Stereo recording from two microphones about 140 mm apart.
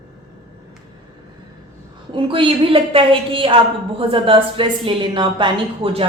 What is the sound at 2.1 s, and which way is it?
Speech, 40° right (ahead or behind).